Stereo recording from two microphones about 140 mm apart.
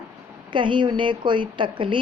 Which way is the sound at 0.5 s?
35° right (ahead or behind).